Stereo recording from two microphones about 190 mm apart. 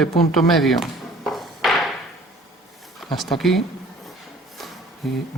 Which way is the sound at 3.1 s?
Centre (ahead or behind).